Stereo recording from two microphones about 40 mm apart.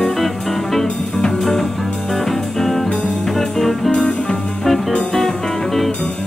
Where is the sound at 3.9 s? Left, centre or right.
Centre.